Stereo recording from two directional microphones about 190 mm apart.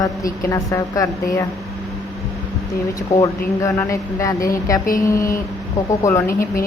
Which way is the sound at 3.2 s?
15° left (ahead or behind).